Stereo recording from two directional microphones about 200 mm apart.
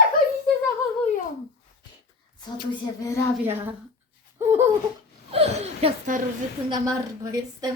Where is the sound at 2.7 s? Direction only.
15° left (ahead or behind).